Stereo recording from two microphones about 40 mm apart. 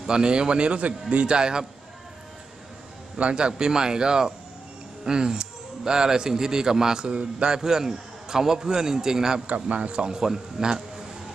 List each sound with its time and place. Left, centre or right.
0.0 s speech: centre
3.2 s a man's voice: right
7.5 s a man's voice: centre
9.5 s speech: right
10.0 s a man's voice: centre